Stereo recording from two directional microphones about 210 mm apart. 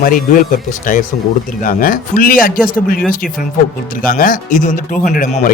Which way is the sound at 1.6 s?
40° left (ahead or behind).